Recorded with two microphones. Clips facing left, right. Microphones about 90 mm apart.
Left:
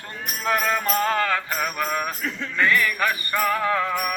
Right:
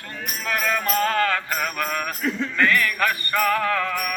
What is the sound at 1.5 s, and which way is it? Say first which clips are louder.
Music: even; 10° left (ahead or behind).